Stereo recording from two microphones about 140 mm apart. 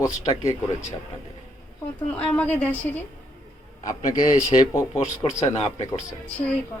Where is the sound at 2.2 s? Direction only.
10° left (ahead or behind).